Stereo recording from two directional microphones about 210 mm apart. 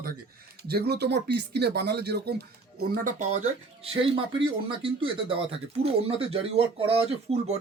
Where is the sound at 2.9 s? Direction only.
40° right (ahead or behind).